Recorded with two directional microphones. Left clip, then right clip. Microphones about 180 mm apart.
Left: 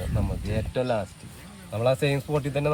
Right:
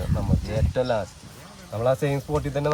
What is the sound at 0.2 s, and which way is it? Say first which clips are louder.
Speech: right 3 dB; 5° right (ahead or behind).